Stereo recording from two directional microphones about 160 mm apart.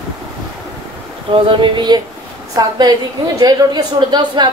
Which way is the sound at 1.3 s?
30° right (ahead or behind).